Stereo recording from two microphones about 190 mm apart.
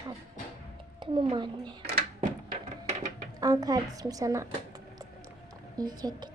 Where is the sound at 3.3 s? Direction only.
20° right (ahead or behind).